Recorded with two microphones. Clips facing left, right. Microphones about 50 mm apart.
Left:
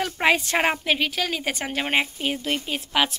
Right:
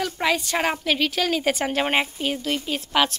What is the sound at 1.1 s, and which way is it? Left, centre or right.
Speech, centre.